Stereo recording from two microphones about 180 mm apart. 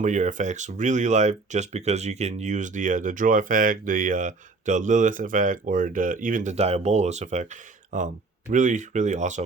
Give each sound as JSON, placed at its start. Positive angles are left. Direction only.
{"t": 0.0, "sound": "speech", "side_deg": -45}